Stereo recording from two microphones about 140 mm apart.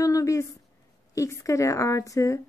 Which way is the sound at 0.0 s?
25° left (ahead or behind).